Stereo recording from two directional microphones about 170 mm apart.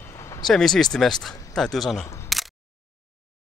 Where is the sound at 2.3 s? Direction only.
Centre (ahead or behind).